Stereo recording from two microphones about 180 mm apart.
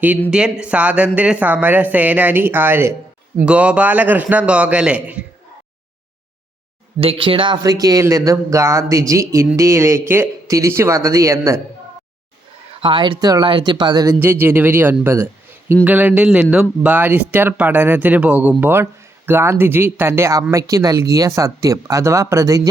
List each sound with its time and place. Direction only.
0.3 s speech: 5° right (ahead or behind)
7.0 s speech: 30° right (ahead or behind)
12.8 s speech: 25° right (ahead or behind)